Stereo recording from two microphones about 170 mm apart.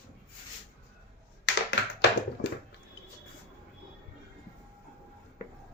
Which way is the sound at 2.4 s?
90° left.